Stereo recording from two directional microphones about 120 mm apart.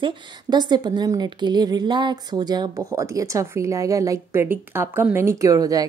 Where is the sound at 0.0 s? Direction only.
35° right (ahead or behind).